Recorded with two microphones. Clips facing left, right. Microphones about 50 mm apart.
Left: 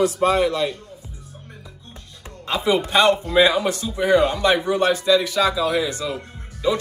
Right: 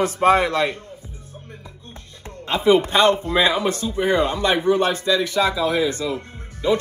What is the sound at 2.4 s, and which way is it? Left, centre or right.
A man's voice, right.